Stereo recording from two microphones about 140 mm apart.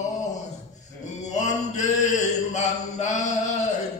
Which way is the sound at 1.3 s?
55° left (ahead or behind).